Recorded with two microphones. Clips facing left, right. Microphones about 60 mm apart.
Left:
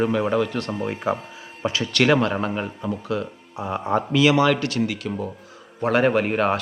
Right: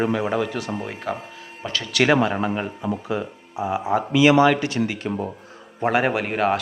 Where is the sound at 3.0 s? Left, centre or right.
Right.